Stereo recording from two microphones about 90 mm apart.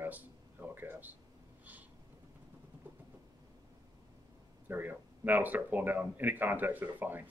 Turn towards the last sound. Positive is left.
turn(degrees=-20)  # may be behind; listen again after turning